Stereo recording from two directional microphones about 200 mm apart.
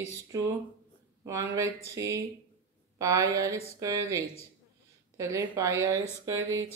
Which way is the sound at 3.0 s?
15° right (ahead or behind).